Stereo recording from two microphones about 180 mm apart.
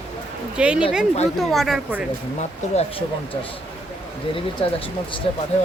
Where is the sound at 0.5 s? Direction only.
5° right (ahead or behind).